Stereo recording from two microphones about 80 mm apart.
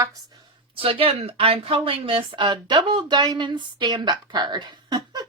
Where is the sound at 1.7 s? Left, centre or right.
Right.